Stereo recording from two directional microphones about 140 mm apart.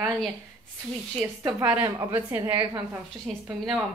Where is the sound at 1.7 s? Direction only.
10° right (ahead or behind).